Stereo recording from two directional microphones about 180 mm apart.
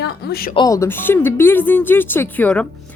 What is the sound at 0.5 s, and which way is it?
A woman's voice, 20° left (ahead or behind).